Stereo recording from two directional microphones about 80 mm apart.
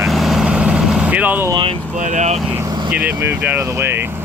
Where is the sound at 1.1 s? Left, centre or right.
Centre.